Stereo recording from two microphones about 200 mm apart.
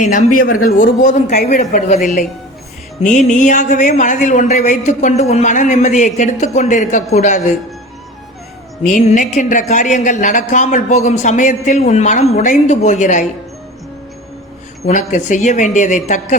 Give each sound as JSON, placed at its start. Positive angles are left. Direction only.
{"t": 0.0, "sound": "speech", "side_deg": 40}
{"t": 3.0, "sound": "speech", "side_deg": 40}
{"t": 8.8, "sound": "speech", "side_deg": 40}
{"t": 14.8, "sound": "speech", "side_deg": 40}